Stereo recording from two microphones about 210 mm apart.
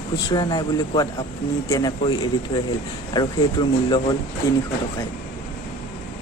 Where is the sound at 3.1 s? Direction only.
20° left (ahead or behind).